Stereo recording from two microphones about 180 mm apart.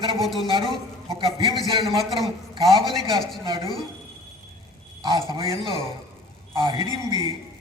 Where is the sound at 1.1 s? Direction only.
30° right (ahead or behind).